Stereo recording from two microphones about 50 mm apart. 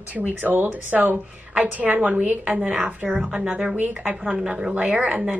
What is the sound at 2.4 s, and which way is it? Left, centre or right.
A woman's voice, centre.